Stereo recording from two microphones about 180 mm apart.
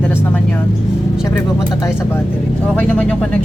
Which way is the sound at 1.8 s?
15° left (ahead or behind).